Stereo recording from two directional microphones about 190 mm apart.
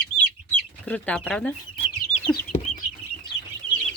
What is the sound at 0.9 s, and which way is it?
Speech, 5° left (ahead or behind).